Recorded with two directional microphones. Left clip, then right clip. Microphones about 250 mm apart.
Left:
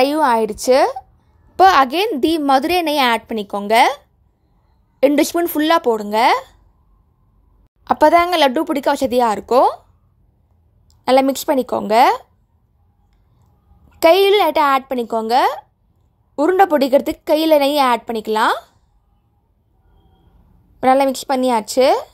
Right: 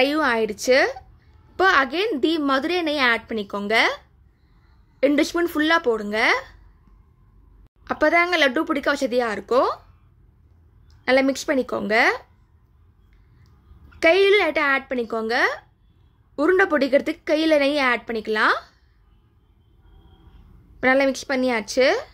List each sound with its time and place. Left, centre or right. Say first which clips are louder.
0.0 s a woman's voice: left 5 dB; centre
5.0 s a woman's voice: left 5 dB; left
7.8 s a woman's voice: left 7 dB; left
11.1 s a woman's voice: left 5 dB; left
13.8 s a woman's voice: left 5 dB; left
20.8 s a woman's voice: left 5 dB; centre